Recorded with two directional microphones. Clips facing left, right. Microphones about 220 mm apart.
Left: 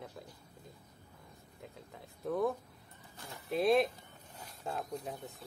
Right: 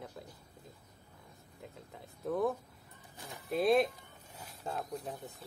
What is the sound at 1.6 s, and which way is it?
Speech, centre (ahead or behind).